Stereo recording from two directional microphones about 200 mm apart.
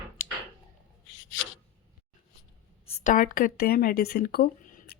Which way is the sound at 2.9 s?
40° left (ahead or behind).